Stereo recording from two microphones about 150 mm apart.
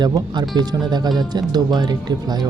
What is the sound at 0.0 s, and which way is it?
Speech, 30° right (ahead or behind).